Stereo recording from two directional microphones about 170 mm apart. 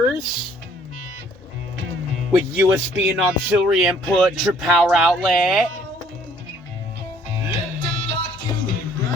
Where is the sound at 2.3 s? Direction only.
5° right (ahead or behind).